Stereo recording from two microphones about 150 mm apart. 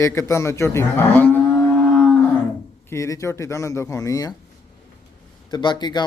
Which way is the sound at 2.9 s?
20° left (ahead or behind).